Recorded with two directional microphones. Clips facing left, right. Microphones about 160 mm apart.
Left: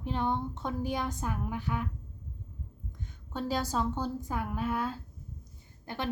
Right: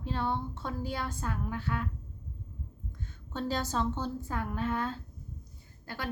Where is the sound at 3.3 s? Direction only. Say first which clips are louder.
Left 1 dB; 10° left (ahead or behind).